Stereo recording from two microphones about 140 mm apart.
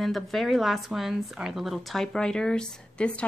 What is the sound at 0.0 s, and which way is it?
Speech, centre (ahead or behind).